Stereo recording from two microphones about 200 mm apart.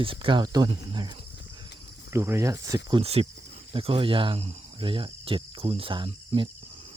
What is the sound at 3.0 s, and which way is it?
Speech, 30° right (ahead or behind).